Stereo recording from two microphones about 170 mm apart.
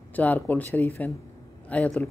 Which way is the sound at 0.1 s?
10° left (ahead or behind).